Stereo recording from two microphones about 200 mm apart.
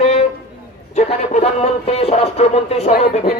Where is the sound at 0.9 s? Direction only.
35° left (ahead or behind).